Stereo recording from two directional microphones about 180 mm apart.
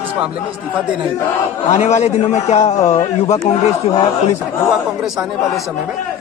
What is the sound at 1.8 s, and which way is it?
Speech, 40° left (ahead or behind).